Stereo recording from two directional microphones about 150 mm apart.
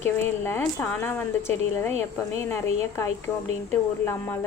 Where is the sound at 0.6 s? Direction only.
10° left (ahead or behind).